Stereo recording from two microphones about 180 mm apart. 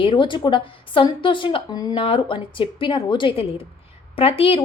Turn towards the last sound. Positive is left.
turn(degrees=30)  # may be behind; listen again after turning